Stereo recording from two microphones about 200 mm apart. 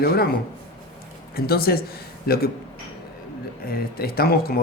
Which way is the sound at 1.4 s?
50° left (ahead or behind).